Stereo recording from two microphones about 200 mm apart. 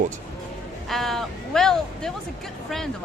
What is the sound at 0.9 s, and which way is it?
Speech, centre (ahead or behind).